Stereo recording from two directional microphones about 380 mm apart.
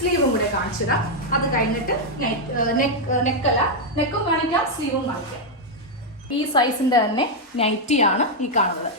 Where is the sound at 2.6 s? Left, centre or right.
Left.